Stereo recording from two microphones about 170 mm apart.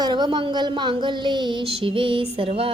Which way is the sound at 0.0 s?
25° right (ahead or behind).